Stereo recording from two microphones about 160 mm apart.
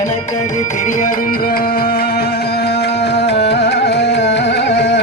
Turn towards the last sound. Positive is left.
turn(degrees=90)